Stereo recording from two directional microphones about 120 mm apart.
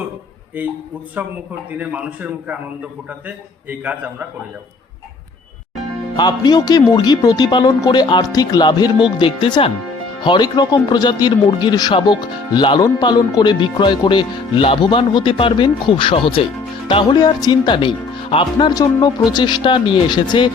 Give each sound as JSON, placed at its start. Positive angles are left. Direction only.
{"t": 0.6, "sound": "a man's voice", "side_deg": -15}
{"t": 1.8, "sound": "a man's voice", "side_deg": -10}
{"t": 6.1, "sound": "speech", "side_deg": 35}
{"t": 10.2, "sound": "speech", "side_deg": 40}
{"t": 18.7, "sound": "speech", "side_deg": 30}